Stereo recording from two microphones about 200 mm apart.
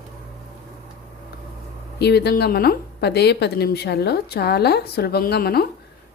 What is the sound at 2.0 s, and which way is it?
A woman's voice, 55° left (ahead or behind).